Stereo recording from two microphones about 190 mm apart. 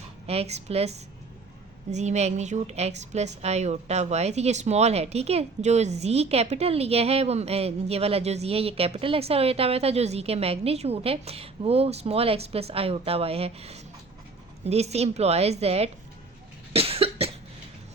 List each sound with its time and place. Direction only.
0.3 s speech: 35° right (ahead or behind)
16.7 s cough: 30° right (ahead or behind)